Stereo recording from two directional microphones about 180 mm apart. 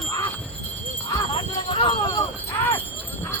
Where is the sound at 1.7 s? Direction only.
30° left (ahead or behind).